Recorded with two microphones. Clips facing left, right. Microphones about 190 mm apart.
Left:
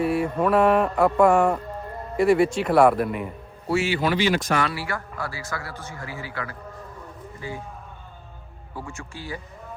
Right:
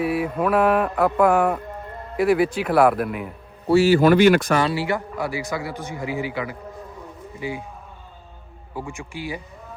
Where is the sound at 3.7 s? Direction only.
40° right (ahead or behind); by 4.5 s 55° right (ahead or behind).